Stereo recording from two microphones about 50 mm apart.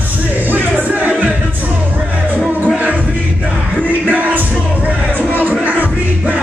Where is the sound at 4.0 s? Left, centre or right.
Right.